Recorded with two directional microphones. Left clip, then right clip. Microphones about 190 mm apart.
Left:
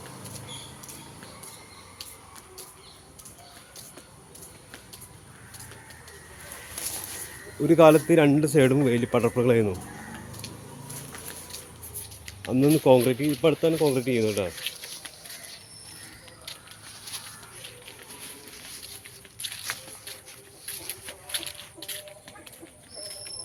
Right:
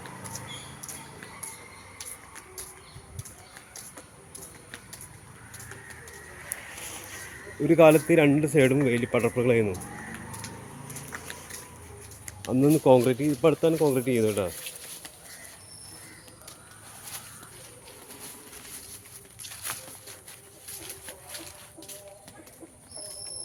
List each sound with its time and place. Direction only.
7.8 s a man's voice: 20° left (ahead or behind)
12.5 s speech: 5° left (ahead or behind)